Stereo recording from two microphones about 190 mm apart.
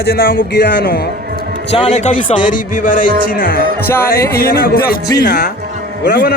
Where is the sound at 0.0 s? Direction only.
55° left (ahead or behind).